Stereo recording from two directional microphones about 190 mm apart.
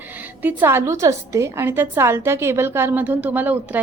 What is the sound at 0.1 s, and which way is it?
A woman's voice, 10° right (ahead or behind).